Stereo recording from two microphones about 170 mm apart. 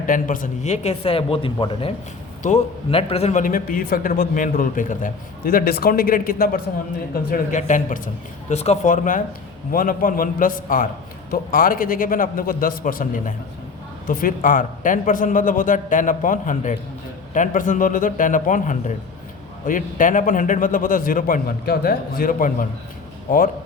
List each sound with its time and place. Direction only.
0.0 s speech: 50° left (ahead or behind); by 1.9 s 30° left (ahead or behind)
2.4 s speech: 40° left (ahead or behind)
3.4 s a man's voice: 55° left (ahead or behind)